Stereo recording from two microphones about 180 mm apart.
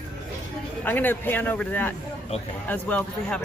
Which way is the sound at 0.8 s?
10° left (ahead or behind).